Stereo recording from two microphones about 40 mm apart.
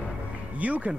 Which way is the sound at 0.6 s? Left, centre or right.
Right.